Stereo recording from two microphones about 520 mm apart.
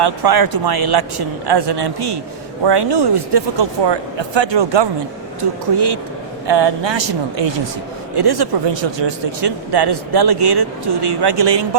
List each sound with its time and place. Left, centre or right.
0.0 s speech: right